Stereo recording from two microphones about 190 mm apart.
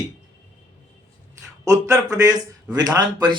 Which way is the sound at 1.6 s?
15° right (ahead or behind).